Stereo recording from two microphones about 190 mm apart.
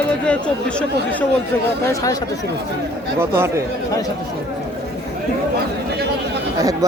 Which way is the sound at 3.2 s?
15° right (ahead or behind).